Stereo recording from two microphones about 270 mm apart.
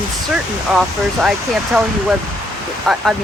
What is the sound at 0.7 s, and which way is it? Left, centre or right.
Speech, centre.